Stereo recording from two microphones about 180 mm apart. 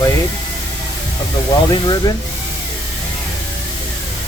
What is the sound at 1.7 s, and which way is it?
Speech, 25° left (ahead or behind).